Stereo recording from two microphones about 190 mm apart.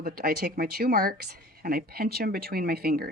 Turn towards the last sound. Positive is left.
turn(degrees=-55)  # may be behind; listen again after turning